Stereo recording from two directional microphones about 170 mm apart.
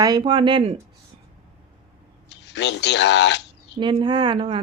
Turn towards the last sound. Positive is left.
turn(degrees=-30)  # may be behind; listen again after turning